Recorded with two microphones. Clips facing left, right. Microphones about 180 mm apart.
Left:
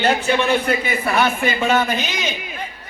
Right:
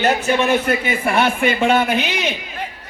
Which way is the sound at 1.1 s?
25° right (ahead or behind).